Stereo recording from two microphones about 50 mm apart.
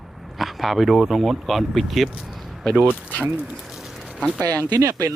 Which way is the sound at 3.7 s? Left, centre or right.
Centre.